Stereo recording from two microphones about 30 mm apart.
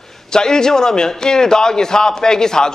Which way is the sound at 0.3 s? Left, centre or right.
Left.